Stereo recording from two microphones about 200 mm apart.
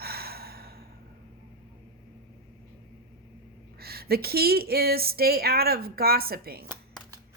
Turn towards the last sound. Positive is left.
turn(degrees=-50)  # may be behind; listen again after turning